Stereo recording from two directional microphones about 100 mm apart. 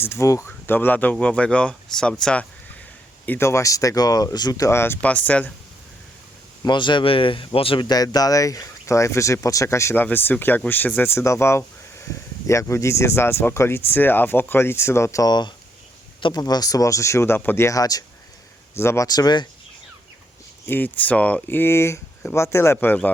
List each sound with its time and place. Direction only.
0.0 s speech: 25° left (ahead or behind); by 2.5 s 10° left (ahead or behind)
3.2 s speech: 25° left (ahead or behind)
6.7 s speech: 55° left (ahead or behind)
7.9 s speech: 40° left (ahead or behind)
15.3 s speech: 45° left (ahead or behind); by 17.7 s 20° left (ahead or behind)
17.7 s speech: 40° left (ahead or behind)
18.7 s speech: 25° left (ahead or behind)
19.0 s speech: 40° left (ahead or behind)
20.7 s speech: 20° left (ahead or behind)